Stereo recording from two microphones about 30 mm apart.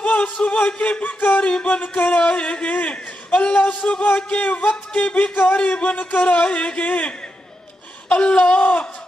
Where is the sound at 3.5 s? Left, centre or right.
Left.